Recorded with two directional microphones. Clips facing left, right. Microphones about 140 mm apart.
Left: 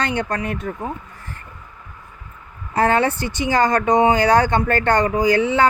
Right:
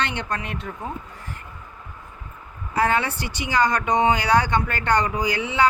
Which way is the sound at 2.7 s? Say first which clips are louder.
Left 5 dB; 50° left (ahead or behind).